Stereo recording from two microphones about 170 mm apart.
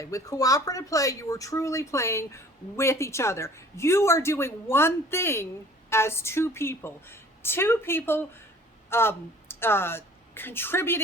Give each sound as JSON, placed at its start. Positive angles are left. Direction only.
{"t": 0.0, "sound": "speech", "side_deg": 20}